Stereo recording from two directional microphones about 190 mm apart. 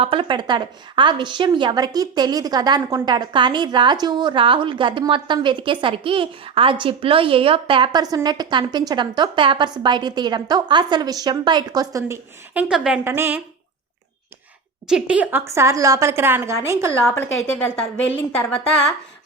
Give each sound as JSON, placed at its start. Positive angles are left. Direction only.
{"t": 0.0, "sound": "a woman's voice", "side_deg": -30}
{"t": 14.8, "sound": "a woman's voice", "side_deg": -5}
{"t": 17.0, "sound": "a woman's voice", "side_deg": 5}